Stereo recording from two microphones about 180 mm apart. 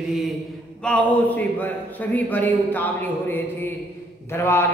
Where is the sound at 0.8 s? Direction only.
5° left (ahead or behind).